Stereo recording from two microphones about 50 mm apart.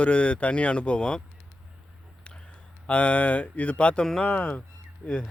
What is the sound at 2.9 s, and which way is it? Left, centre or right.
A man's voice, left.